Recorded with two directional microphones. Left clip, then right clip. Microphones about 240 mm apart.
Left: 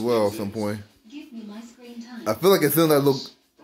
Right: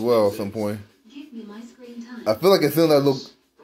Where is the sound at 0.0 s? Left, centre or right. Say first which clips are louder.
Right 3 dB; centre.